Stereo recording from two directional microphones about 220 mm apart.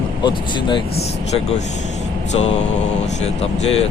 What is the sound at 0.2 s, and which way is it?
Speech, 20° left (ahead or behind).